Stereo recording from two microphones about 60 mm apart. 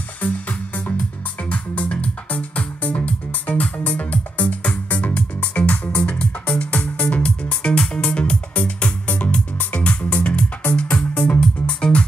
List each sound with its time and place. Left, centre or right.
0.2 s music: left
11.1 s music: left